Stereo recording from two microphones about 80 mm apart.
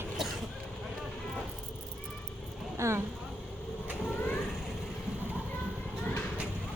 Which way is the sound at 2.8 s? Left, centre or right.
Right.